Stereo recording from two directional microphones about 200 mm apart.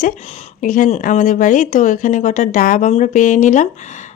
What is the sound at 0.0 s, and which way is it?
A woman's voice, 35° left (ahead or behind).